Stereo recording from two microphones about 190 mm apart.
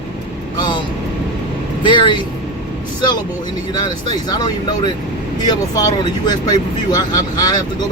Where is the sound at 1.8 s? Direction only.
25° left (ahead or behind).